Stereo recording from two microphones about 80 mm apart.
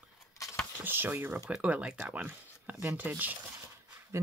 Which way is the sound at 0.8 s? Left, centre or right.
Right.